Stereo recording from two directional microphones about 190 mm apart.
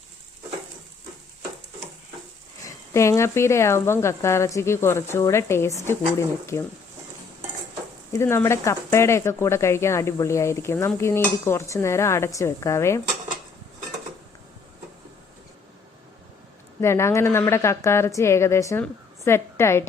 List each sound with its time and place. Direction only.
2.6 s speech: 15° left (ahead or behind)
8.1 s speech: 15° left (ahead or behind)
16.8 s speech: 15° left (ahead or behind)